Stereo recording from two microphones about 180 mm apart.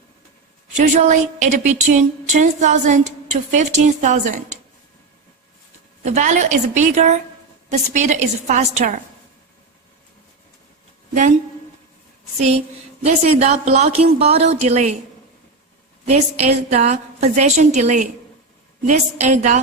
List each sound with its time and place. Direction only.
0.8 s a woman's voice: 40° right (ahead or behind)
6.0 s a woman's voice: 40° right (ahead or behind)
11.1 s a woman's voice: 45° right (ahead or behind)
12.4 s a woman's voice: 40° right (ahead or behind)
16.0 s a woman's voice: 35° right (ahead or behind)